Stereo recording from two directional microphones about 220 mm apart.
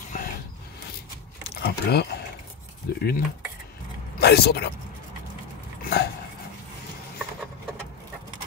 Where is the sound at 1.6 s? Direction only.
45° left (ahead or behind).